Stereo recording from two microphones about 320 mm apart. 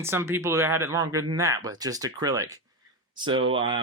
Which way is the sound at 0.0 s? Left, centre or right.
Centre.